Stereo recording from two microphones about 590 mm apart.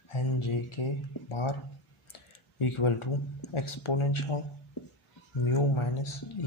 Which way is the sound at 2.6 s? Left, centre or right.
Left.